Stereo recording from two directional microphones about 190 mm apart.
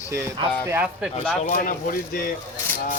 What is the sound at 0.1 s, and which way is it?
Speech, 15° right (ahead or behind).